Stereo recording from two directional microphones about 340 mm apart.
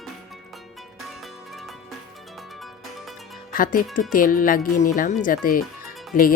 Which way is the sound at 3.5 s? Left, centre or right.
Left.